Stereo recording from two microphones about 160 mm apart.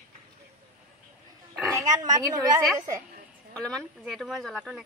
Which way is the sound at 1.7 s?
25° right (ahead or behind).